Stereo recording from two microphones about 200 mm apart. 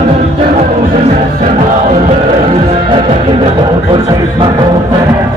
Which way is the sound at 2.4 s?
30° right (ahead or behind).